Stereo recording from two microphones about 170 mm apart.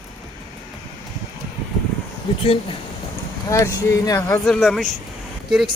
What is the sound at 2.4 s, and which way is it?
Speech, 35° left (ahead or behind).